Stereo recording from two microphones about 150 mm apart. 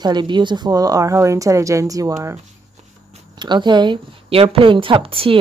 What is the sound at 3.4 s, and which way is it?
A woman's voice, 30° right (ahead or behind).